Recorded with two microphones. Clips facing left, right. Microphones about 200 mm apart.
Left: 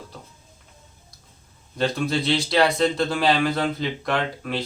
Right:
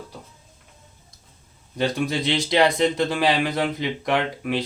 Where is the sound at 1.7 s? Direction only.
15° right (ahead or behind).